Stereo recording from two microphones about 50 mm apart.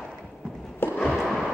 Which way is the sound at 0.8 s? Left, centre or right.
Left.